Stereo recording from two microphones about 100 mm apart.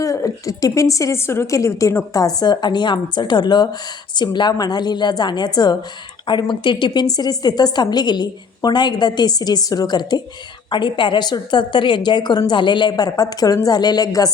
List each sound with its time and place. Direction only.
0.0 s a woman's voice: 35° left (ahead or behind)
2.2 s a woman's voice: 40° left (ahead or behind)